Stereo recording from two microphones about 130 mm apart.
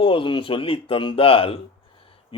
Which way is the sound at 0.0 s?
40° left (ahead or behind).